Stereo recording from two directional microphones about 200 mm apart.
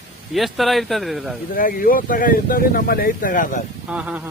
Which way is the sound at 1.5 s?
45° left (ahead or behind).